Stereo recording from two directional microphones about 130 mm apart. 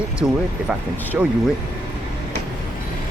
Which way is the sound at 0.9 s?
15° left (ahead or behind).